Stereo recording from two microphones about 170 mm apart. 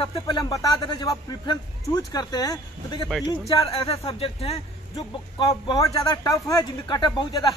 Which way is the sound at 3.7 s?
35° left (ahead or behind).